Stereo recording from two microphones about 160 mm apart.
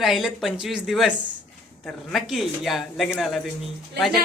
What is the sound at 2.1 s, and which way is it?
Speech, centre (ahead or behind).